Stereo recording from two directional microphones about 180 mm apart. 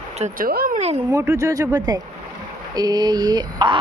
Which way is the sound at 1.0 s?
15° right (ahead or behind).